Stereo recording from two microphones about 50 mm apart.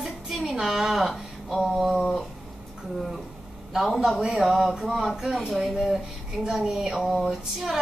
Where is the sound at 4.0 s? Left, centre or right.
Centre.